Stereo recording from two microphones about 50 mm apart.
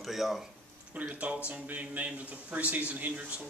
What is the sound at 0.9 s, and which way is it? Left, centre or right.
A man's voice, right.